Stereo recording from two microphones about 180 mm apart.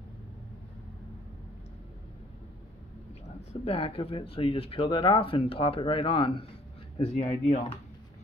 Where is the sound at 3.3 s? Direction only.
35° left (ahead or behind).